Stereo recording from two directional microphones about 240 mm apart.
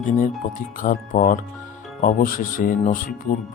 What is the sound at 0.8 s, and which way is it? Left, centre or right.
Speech, left.